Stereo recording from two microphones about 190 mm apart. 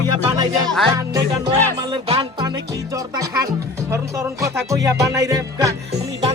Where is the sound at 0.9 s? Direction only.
20° right (ahead or behind).